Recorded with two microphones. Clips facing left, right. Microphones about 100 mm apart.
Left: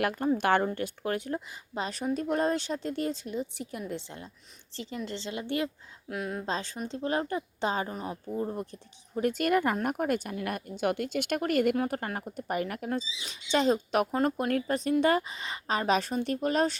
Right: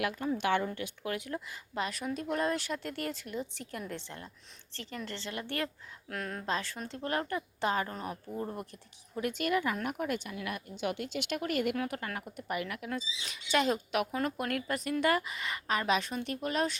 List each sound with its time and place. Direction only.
0.0 s a woman's voice: 50° left (ahead or behind)
1.5 s a woman's voice: 25° left (ahead or behind)
6.1 s speech: 10° left (ahead or behind)
6.4 s a woman's voice: 25° left (ahead or behind); by 11.8 s 45° left (ahead or behind)
11.8 s a woman's voice: 35° left (ahead or behind)